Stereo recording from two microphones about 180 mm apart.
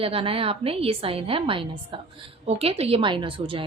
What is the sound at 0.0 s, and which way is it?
A woman's voice, 30° right (ahead or behind).